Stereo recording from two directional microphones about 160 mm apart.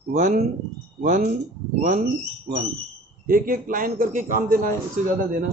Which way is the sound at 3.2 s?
65° right (ahead or behind).